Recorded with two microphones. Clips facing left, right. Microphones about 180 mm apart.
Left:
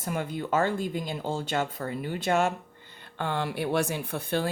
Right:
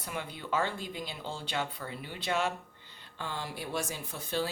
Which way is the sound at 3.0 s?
65° left (ahead or behind).